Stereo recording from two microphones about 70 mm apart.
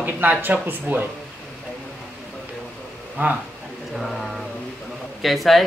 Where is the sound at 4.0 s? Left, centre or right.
Centre.